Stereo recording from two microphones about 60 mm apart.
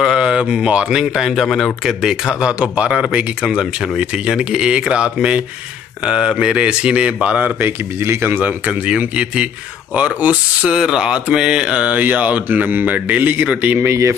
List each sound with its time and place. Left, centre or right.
0.0 s speech: centre
1.5 s speech: centre
2.0 s speech: centre
4.3 s speech: centre
7.6 s speech: right
8.6 s speech: centre